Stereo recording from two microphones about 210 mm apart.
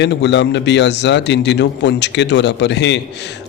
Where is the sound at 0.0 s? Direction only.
55° left (ahead or behind).